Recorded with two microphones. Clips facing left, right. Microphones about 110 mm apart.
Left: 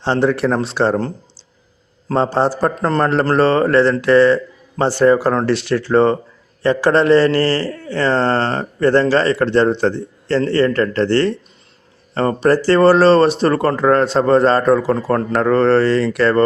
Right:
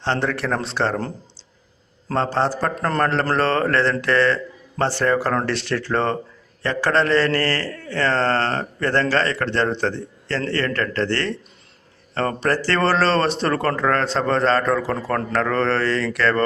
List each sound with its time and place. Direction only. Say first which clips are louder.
0.0 s a man's voice: left 7 dB; 10° left (ahead or behind)
2.1 s a man's voice: left 5 dB; 15° left (ahead or behind)